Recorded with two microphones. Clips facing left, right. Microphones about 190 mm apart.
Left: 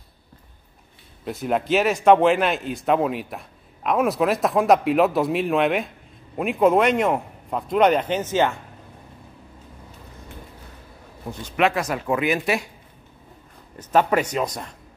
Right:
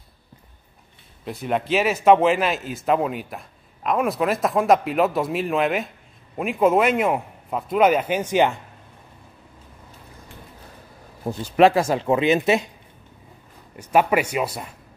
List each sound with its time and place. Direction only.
1.2 s speech: centre (ahead or behind)
11.2 s speech: 35° right (ahead or behind)
13.7 s speech: 10° right (ahead or behind)